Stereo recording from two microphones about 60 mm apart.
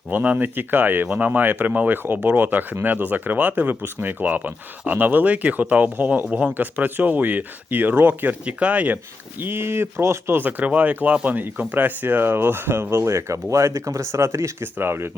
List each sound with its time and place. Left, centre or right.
0.1 s speech: right
8.4 s speech: right
9.4 s speech: right
10.4 s speech: right